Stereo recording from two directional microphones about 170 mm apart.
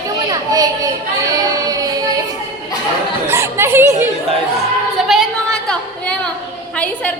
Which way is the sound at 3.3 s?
15° right (ahead or behind).